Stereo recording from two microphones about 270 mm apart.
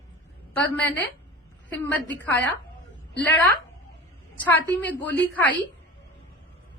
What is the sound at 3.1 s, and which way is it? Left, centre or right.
Speech, left.